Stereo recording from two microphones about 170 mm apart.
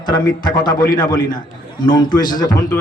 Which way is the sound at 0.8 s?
55° left (ahead or behind).